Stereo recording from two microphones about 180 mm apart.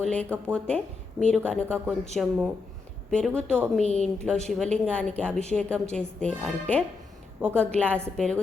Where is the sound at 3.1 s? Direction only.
5° left (ahead or behind).